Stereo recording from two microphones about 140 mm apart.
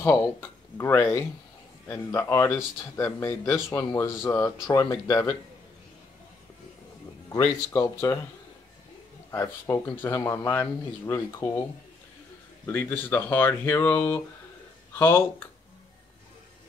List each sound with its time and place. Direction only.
0.0 s speech: 20° left (ahead or behind)
7.2 s speech: 20° left (ahead or behind)
9.3 s speech: 20° left (ahead or behind)
12.6 s speech: 15° left (ahead or behind)